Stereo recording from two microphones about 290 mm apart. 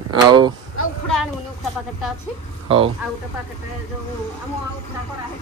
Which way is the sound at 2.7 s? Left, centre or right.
Centre.